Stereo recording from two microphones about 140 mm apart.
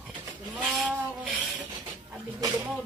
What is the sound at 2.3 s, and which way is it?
Speech, 25° right (ahead or behind).